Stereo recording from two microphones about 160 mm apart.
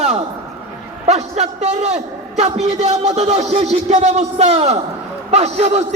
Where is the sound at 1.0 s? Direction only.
45° right (ahead or behind).